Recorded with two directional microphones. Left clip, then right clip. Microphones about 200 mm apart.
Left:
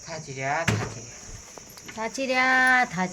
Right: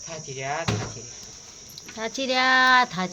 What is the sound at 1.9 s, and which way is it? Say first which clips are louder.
Speech: even; 5° right (ahead or behind).